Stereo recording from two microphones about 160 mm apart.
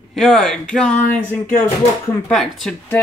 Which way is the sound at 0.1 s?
Centre (ahead or behind).